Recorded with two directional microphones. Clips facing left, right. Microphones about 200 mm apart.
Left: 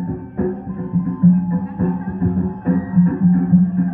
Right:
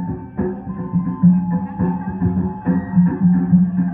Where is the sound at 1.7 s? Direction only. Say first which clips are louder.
Even; 35° left (ahead or behind).